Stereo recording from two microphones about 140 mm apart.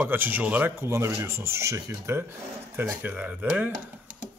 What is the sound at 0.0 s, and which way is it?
Speech, 15° right (ahead or behind).